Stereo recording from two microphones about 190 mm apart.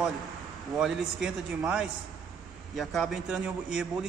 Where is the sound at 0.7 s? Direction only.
5° right (ahead or behind).